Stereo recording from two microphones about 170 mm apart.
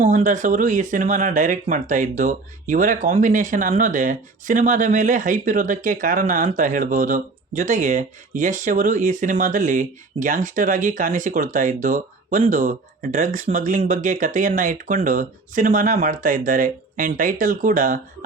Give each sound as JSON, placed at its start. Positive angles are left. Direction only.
{"t": 0.0, "sound": "speech", "side_deg": -45}